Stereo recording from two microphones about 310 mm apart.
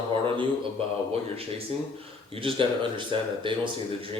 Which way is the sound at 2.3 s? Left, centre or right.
Centre.